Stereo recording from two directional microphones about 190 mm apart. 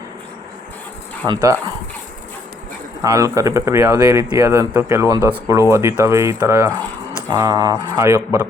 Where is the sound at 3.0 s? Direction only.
15° right (ahead or behind).